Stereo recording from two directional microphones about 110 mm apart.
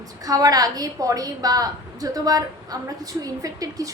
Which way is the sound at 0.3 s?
35° right (ahead or behind).